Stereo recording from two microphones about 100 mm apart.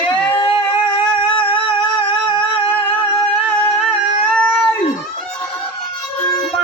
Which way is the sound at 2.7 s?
15° left (ahead or behind).